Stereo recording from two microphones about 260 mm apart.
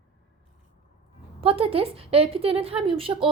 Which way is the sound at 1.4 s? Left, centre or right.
Right.